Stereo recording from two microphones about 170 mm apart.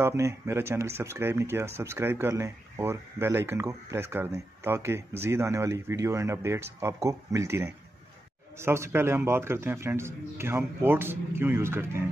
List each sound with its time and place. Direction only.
0.0 s speech: 15° right (ahead or behind)